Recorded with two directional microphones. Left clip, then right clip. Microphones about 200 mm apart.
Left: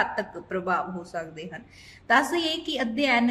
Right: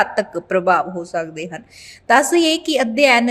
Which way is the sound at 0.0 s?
45° right (ahead or behind).